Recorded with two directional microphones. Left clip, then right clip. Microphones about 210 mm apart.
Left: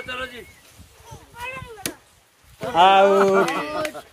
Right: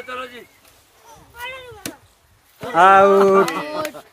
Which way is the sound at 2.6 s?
30° right (ahead or behind).